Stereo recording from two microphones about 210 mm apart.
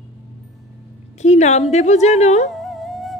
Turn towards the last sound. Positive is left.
turn(degrees=0)  # may be behind; listen again after turning